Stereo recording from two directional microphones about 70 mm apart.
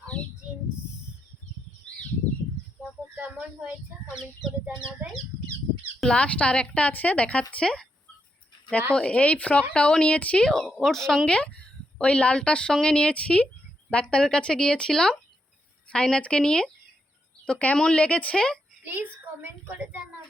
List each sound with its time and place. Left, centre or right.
1.9 s bird: centre
3.0 s speech: right
5.0 s speech: right
6.1 s speech: centre
9.0 s speech: centre
18.9 s a child's voice: right